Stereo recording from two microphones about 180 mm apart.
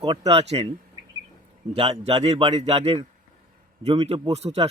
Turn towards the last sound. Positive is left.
turn(degrees=-35)  # may be behind; listen again after turning